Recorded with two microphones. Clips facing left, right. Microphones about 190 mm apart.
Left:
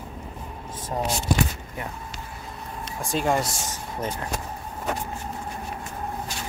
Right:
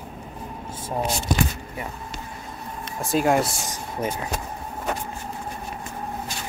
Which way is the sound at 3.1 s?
5° right (ahead or behind).